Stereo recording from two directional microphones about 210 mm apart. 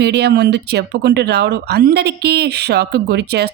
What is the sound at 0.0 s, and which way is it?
Speech, 50° right (ahead or behind).